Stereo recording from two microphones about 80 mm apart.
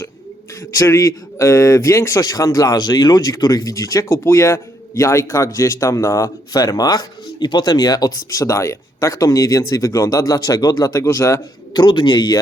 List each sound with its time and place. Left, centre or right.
0.8 s a man's voice: left
8.4 s speech: left
11.7 s speech: left